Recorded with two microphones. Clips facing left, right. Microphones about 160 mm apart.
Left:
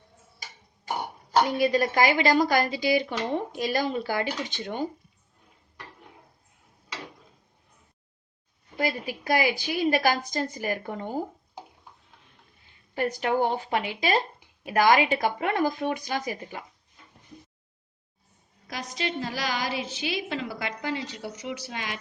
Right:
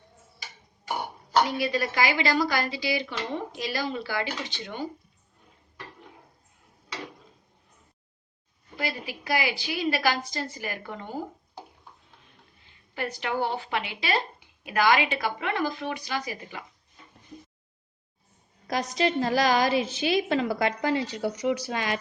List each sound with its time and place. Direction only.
1.5 s speech: 45° left (ahead or behind)
8.8 s speech: 45° left (ahead or behind)
12.9 s speech: 45° left (ahead or behind)
18.7 s a woman's voice: 40° right (ahead or behind)